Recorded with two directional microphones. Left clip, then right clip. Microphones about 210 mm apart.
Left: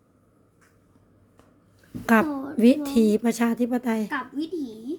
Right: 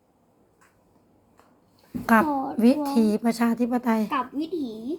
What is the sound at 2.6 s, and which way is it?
A woman's voice, 40° left (ahead or behind).